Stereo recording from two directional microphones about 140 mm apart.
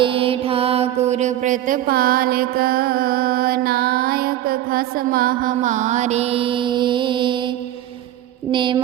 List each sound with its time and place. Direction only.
0.0 s mantra: 40° right (ahead or behind)
8.5 s mantra: 35° right (ahead or behind)